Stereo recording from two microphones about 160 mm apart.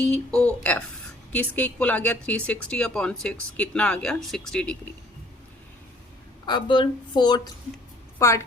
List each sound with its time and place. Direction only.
0.0 s a sound: 5° left (ahead or behind)
1.3 s speech: 10° left (ahead or behind)
6.4 s speech: 30° left (ahead or behind)